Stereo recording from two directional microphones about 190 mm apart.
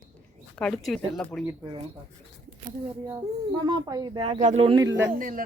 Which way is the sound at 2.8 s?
20° right (ahead or behind).